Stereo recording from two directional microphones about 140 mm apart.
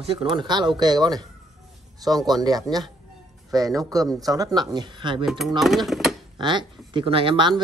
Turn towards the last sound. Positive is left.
turn(degrees=-35)  # may be behind; listen again after turning